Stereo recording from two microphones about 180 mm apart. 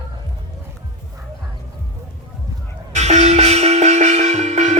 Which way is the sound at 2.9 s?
40° right (ahead or behind).